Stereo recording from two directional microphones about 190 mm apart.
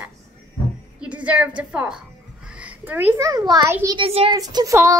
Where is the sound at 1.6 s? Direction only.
5° right (ahead or behind).